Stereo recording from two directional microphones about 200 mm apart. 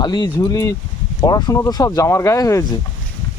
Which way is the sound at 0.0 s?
20° left (ahead or behind).